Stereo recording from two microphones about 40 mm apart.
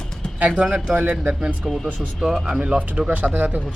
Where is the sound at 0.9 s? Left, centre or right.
Right.